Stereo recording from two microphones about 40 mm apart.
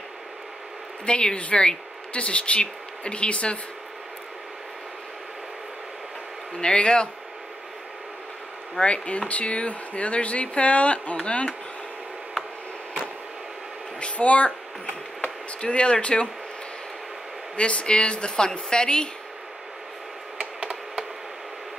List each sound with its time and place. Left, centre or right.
1.0 s speech: left
6.6 s a woman's voice: left
8.7 s a woman's voice: left
13.9 s a sound: left
15.6 s a woman's voice: left
17.6 s a woman's voice: left